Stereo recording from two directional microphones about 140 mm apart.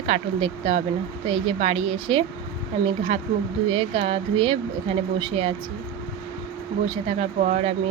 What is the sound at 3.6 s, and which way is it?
Speech, 45° right (ahead or behind).